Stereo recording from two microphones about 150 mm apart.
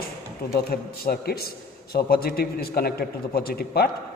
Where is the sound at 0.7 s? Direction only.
90° left.